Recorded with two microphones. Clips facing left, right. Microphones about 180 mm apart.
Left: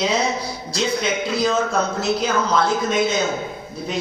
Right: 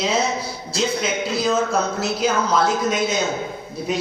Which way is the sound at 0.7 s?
5° right (ahead or behind).